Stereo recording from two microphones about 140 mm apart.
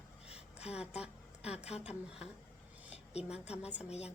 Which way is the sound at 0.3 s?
50° left (ahead or behind).